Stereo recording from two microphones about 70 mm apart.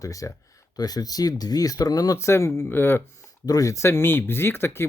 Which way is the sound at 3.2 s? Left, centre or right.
Left.